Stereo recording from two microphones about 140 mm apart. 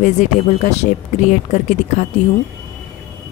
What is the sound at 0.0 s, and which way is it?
Speech, 55° left (ahead or behind).